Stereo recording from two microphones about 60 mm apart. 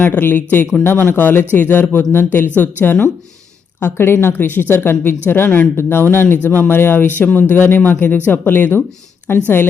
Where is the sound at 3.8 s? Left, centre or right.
Left.